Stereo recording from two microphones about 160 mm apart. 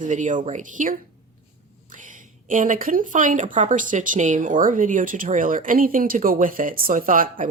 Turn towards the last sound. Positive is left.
turn(degrees=-60)  # may be behind; listen again after turning